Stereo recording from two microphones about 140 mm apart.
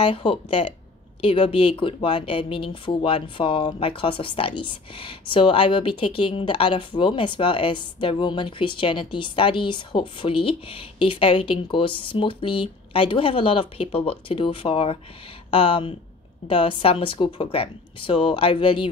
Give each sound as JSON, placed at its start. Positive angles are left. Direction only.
{"t": 0.0, "sound": "speech", "side_deg": 40}